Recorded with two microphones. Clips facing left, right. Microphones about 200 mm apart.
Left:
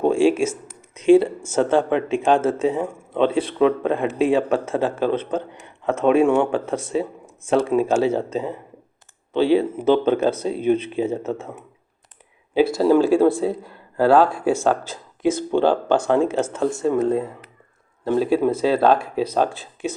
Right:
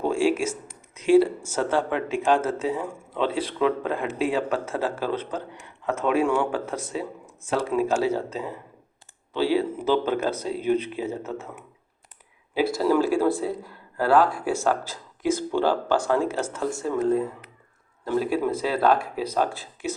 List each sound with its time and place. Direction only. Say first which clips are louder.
0.1 s a man's voice: left 5 dB; 25° left (ahead or behind)